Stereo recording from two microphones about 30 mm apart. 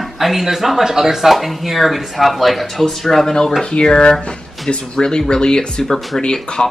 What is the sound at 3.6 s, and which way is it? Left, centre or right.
Speech, left.